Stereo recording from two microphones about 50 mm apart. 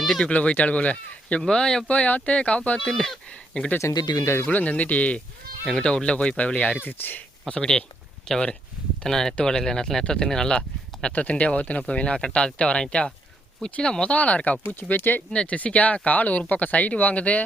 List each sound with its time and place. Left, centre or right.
0.2 s speech: left
1.4 s speech: centre
1.9 s speech: left; by 3.2 s centre
3.8 s speech: left
4.4 s speech: left
5.7 s speech: centre
6.7 s speech: left
7.4 s speech: centre
11.1 s speech: left
15.3 s speech: left